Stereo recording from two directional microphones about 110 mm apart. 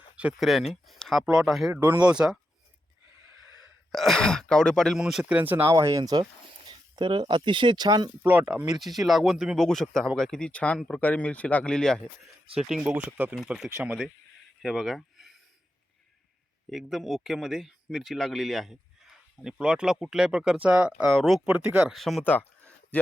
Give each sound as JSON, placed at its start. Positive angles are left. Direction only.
{"t": 0.2, "sound": "speech", "side_deg": -5}
{"t": 1.7, "sound": "speech", "side_deg": -20}
{"t": 3.9, "sound": "speech", "side_deg": 5}
{"t": 4.9, "sound": "speech", "side_deg": -5}
{"t": 5.7, "sound": "speech", "side_deg": -35}
{"t": 8.2, "sound": "speech", "side_deg": -15}
{"t": 14.6, "sound": "a sound", "side_deg": 0}
{"t": 16.6, "sound": "speech", "side_deg": 0}
{"t": 21.1, "sound": "speech", "side_deg": 0}
{"t": 21.5, "sound": "speech", "side_deg": -10}
{"t": 21.9, "sound": "speech", "side_deg": 0}
{"t": 22.2, "sound": "a sound", "side_deg": 15}